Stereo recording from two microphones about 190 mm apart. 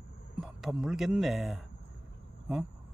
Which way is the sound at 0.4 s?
Centre (ahead or behind).